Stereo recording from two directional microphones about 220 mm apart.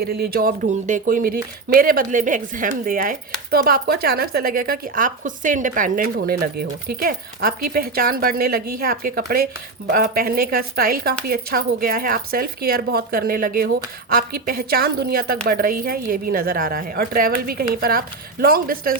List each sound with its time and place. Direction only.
0.0 s a woman's voice: 45° right (ahead or behind)